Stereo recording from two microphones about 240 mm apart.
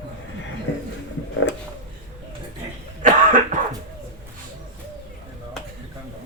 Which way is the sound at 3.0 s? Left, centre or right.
Right.